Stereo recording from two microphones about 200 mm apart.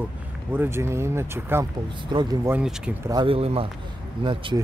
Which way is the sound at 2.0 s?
20° right (ahead or behind).